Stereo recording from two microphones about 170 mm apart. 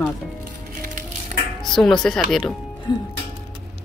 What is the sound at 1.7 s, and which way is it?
Speech, 5° left (ahead or behind).